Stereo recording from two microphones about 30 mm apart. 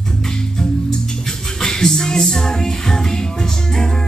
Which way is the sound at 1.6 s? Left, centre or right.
Left.